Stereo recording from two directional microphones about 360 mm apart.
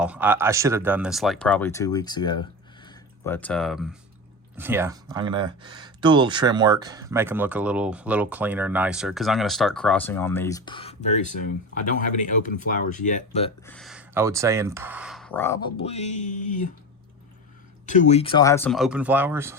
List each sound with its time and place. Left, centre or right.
0.0 s speech: centre
2.8 s a sound: centre
4.5 s speech: centre
13.7 s speech: centre; by 16.7 s left
17.8 s speech: centre